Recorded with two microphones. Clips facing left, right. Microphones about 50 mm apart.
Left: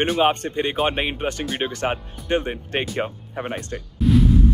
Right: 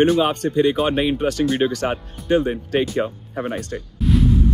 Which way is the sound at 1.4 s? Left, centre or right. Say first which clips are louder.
Right 10 dB; centre.